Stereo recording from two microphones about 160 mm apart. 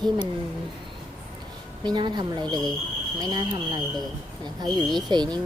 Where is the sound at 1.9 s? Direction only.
25° right (ahead or behind).